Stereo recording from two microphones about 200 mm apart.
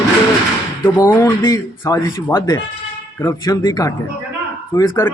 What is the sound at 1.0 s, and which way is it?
Speech, 15° left (ahead or behind).